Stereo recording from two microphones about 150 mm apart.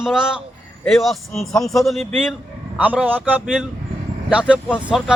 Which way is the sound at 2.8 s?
10° right (ahead or behind).